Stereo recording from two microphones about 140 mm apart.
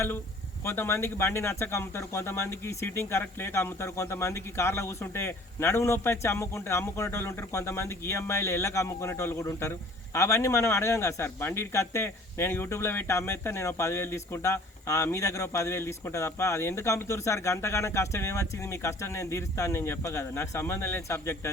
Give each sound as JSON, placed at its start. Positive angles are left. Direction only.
{"t": 0.6, "sound": "speech", "side_deg": 20}